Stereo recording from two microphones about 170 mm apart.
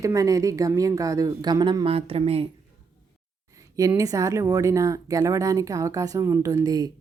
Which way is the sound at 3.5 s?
20° right (ahead or behind).